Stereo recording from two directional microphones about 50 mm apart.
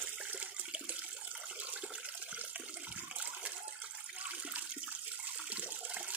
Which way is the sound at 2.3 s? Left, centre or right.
Right.